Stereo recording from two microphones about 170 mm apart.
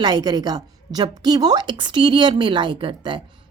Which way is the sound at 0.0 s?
25° right (ahead or behind).